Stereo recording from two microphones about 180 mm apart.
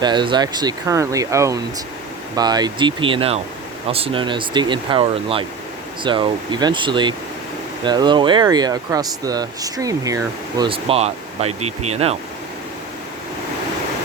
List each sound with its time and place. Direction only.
0.0 s speech: 25° right (ahead or behind)
10.7 s speech: 30° right (ahead or behind)